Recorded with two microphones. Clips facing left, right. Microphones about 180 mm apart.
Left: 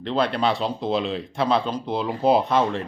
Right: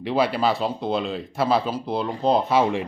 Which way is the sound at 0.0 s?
10° right (ahead or behind).